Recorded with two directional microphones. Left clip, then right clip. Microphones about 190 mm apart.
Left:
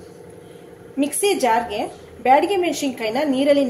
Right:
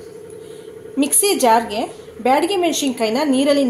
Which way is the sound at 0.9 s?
30° right (ahead or behind).